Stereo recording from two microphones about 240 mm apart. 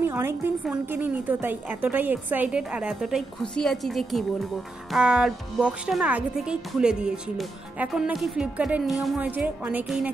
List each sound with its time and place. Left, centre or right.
0.0 s a woman's voice: centre